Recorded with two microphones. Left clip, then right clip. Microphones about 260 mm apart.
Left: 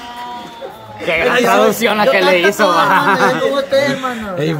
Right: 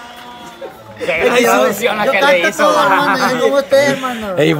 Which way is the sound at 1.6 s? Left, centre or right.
Left.